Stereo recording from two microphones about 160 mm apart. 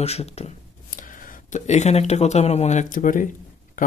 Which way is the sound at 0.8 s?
55° left (ahead or behind).